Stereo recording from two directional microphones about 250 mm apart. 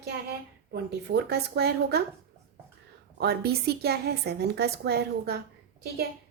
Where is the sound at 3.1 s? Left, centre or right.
Right.